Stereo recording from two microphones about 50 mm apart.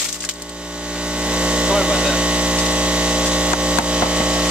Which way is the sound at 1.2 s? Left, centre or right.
Right.